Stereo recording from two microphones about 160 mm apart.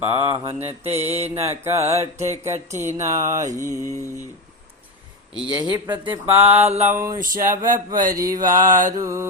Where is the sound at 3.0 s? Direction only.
20° right (ahead or behind).